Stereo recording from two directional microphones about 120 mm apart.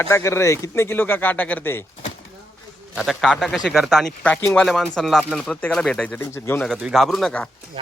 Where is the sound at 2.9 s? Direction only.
Centre (ahead or behind).